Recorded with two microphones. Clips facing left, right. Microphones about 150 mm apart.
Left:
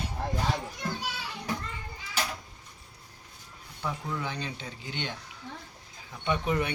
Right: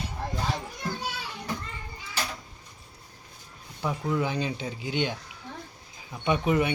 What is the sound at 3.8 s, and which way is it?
Speech, 15° right (ahead or behind).